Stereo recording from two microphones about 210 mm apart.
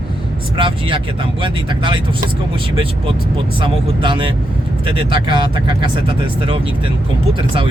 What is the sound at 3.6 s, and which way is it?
Speech, 25° right (ahead or behind).